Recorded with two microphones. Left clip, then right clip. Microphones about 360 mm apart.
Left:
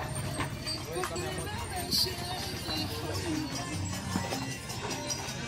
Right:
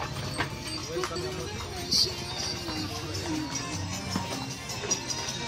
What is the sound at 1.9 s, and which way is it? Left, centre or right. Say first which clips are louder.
Music: right 4 dB; left.